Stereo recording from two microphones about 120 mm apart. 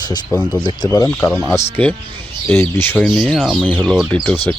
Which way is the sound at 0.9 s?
25° left (ahead or behind).